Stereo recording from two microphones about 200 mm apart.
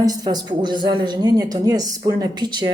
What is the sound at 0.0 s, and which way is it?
A woman's voice, 20° right (ahead or behind).